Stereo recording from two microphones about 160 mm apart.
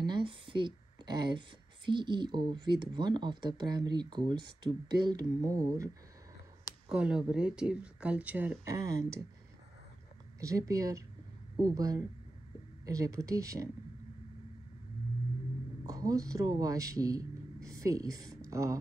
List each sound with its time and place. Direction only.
0.0 s a sound: 30° right (ahead or behind)
1.9 s speech: 30° right (ahead or behind)
6.9 s speech: 5° right (ahead or behind)
10.4 s speech: 20° right (ahead or behind)
15.8 s speech: 20° right (ahead or behind)